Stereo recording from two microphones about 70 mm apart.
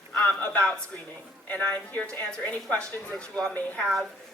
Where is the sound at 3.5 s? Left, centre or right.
Left.